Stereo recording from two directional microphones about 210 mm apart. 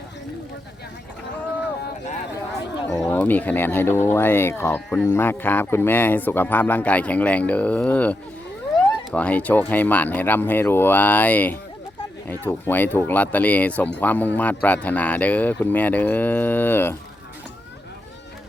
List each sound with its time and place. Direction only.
3.0 s speech: 10° left (ahead or behind)
9.1 s speech: 5° left (ahead or behind)